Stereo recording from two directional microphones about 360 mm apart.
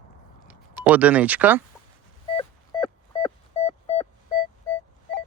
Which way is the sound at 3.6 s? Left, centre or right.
Centre.